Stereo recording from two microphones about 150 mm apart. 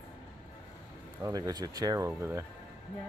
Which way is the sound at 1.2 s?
25° right (ahead or behind).